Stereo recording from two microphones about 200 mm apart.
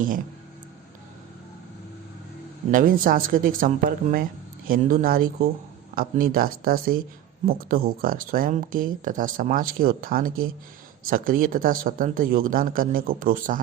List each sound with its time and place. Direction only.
2.7 s speech: 45° right (ahead or behind)